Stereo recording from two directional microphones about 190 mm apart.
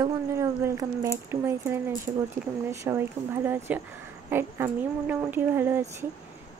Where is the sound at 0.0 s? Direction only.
15° right (ahead or behind).